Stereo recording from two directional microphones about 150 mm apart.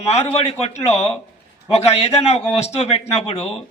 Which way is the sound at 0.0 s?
45° left (ahead or behind).